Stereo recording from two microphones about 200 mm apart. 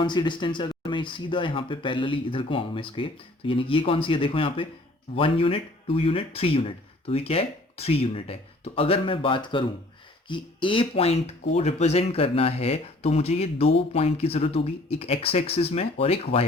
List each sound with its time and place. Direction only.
0.0 s speech: 25° left (ahead or behind)